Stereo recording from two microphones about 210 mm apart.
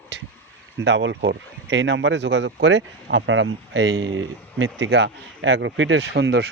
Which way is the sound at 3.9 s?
70° right (ahead or behind).